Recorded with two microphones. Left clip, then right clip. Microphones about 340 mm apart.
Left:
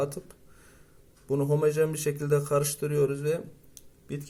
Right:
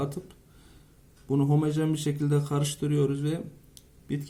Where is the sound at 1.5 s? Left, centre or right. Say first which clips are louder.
Left 3 dB; left.